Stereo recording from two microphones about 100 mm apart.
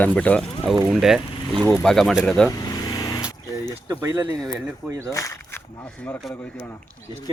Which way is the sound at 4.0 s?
30° right (ahead or behind).